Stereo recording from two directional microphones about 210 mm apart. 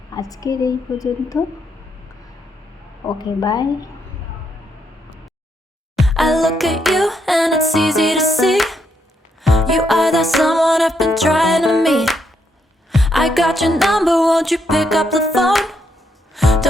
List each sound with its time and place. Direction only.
0.1 s a woman's voice: 15° left (ahead or behind)
3.2 s speech: 20° left (ahead or behind)
6.0 s music: centre (ahead or behind)